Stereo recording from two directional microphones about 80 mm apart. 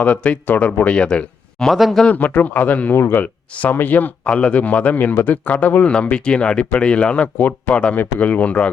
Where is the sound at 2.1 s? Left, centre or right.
Left.